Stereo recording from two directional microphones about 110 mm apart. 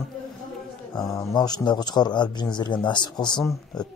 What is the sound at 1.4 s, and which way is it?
A man's voice, 40° left (ahead or behind).